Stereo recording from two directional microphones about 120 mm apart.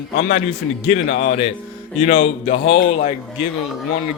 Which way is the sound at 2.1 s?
60° left (ahead or behind).